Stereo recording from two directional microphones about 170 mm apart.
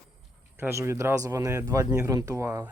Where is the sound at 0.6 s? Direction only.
15° right (ahead or behind).